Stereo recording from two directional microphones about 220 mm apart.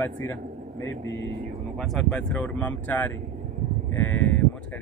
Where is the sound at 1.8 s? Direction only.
Centre (ahead or behind).